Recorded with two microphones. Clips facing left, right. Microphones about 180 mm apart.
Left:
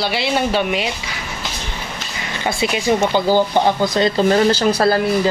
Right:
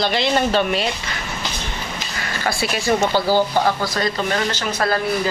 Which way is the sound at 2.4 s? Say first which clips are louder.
Left 3 dB; 20° left (ahead or behind).